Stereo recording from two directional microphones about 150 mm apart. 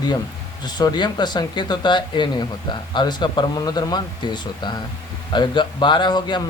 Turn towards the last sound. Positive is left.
turn(degrees=30)  # may be behind; listen again after turning